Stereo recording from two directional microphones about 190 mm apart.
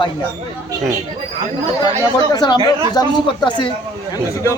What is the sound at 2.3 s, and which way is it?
A man's voice, 20° left (ahead or behind).